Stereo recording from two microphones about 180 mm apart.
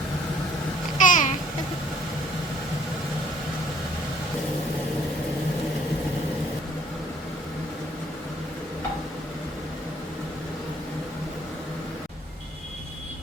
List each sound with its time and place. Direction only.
0.9 s babbling: 45° left (ahead or behind)